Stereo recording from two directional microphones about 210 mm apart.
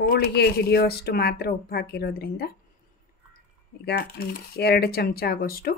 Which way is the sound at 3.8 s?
50° left (ahead or behind).